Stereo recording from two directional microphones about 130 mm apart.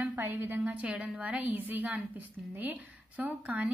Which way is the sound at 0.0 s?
15° right (ahead or behind).